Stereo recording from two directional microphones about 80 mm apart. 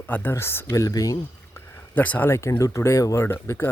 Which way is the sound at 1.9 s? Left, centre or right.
Left.